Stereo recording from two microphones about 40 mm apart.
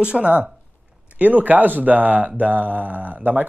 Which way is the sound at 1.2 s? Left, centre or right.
Right.